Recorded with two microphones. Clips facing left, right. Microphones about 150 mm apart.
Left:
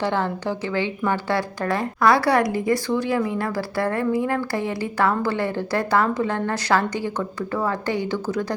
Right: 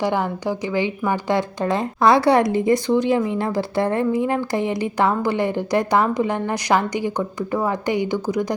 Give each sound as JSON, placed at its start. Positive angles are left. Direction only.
{"t": 0.0, "sound": "a woman's voice", "side_deg": -15}